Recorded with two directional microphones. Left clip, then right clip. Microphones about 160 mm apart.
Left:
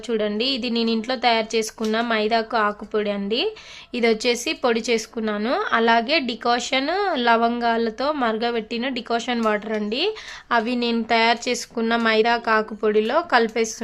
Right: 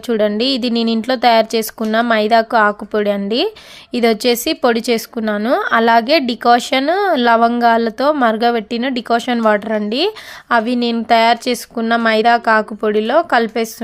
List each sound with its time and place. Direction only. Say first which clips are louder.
0.1 s speech: right 7 dB; 40° right (ahead or behind)
10.6 s speech: right 5 dB; 30° right (ahead or behind)